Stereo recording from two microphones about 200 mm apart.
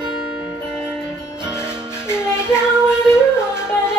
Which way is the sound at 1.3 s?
20° right (ahead or behind).